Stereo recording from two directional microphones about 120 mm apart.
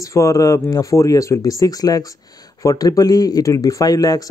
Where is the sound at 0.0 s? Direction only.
25° left (ahead or behind).